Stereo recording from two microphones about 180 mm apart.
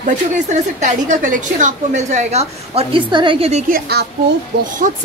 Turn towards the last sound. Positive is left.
turn(degrees=-45)  # may be behind; listen again after turning